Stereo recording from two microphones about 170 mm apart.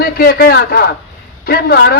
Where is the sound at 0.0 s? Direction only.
65° left (ahead or behind).